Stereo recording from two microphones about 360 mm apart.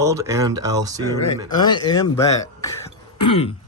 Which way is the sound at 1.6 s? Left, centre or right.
Centre.